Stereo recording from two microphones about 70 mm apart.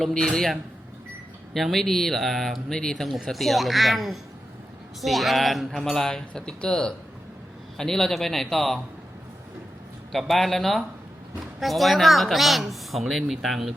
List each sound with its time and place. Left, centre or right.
0.0 s a man's voice: centre
1.5 s speech: centre
10.1 s speech: centre